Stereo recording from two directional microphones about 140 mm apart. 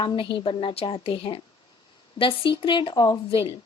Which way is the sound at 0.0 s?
35° left (ahead or behind).